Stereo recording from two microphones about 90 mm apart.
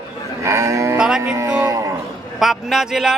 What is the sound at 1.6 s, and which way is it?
Livestock, 40° right (ahead or behind).